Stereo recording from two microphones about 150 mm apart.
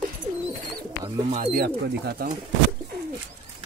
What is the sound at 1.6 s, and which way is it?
Speech, 90° right.